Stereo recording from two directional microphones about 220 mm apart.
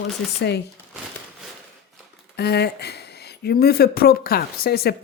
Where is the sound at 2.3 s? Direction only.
45° left (ahead or behind).